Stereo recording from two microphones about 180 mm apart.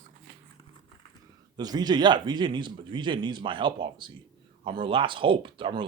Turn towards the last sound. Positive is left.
turn(degrees=-25)  # may be behind; listen again after turning